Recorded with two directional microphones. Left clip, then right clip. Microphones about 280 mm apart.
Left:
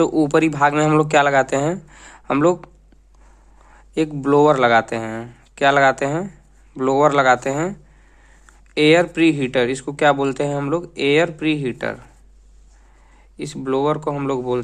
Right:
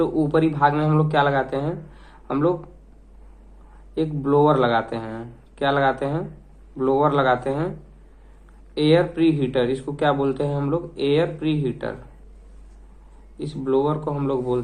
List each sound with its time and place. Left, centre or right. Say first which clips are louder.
0.0 s speech: left 4 dB; left
3.9 s speech: left 4 dB; left
8.7 s speech: left 4 dB; left
13.3 s speech: even; left